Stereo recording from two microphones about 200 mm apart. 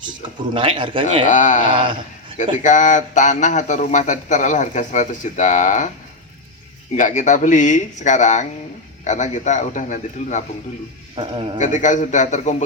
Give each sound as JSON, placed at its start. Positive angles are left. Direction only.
{"t": 0.5, "sound": "speech", "side_deg": -25}
{"t": 1.3, "sound": "a man's voice", "side_deg": 40}
{"t": 6.9, "sound": "a man's voice", "side_deg": 40}
{"t": 11.2, "sound": "speech", "side_deg": -25}
{"t": 11.6, "sound": "a man's voice", "side_deg": 40}